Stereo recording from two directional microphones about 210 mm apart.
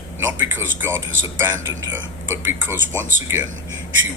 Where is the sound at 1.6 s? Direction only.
65° right (ahead or behind).